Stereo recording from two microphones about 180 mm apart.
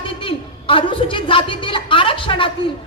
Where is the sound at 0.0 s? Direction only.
30° left (ahead or behind).